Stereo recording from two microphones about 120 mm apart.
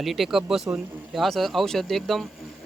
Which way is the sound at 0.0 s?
Centre (ahead or behind).